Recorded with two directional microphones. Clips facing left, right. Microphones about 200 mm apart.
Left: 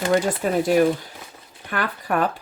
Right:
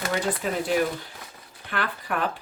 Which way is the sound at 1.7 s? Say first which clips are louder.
Left 5 dB; 45° left (ahead or behind).